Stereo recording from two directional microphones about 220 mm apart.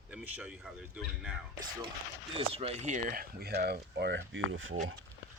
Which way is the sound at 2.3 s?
25° right (ahead or behind).